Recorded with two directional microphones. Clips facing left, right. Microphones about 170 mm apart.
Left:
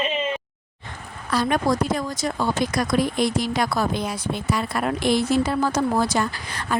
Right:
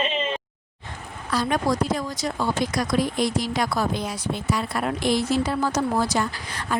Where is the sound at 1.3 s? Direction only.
60° left (ahead or behind).